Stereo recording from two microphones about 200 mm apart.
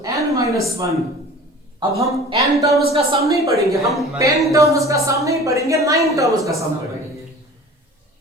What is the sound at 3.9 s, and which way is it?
Speech, centre (ahead or behind).